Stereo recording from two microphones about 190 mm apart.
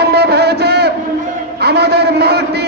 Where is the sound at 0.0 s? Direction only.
60° right (ahead or behind).